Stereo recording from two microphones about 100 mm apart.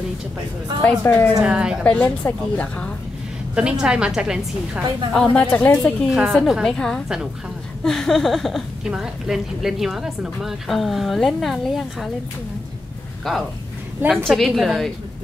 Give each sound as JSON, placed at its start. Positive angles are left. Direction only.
{"t": 0.8, "sound": "a woman's voice", "side_deg": 20}
{"t": 1.4, "sound": "a woman's voice", "side_deg": -10}
{"t": 1.9, "sound": "a woman's voice", "side_deg": 10}
{"t": 3.8, "sound": "a woman's voice", "side_deg": -10}
{"t": 5.1, "sound": "a woman's voice", "side_deg": 5}
{"t": 6.0, "sound": "a woman's voice", "side_deg": -10}
{"t": 13.3, "sound": "a woman's voice", "side_deg": 0}